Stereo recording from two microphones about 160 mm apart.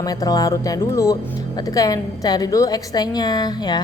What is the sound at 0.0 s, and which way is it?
A woman's voice, 25° left (ahead or behind).